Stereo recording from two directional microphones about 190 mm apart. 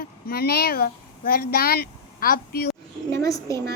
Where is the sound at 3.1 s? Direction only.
15° left (ahead or behind).